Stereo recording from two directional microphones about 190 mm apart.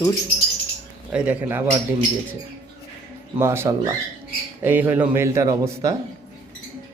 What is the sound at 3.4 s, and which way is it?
A man's voice, 15° right (ahead or behind).